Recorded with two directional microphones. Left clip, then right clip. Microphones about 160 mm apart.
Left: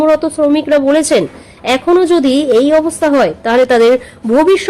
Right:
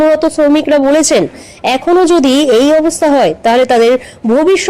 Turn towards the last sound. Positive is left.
turn(degrees=-15)  # may be behind; listen again after turning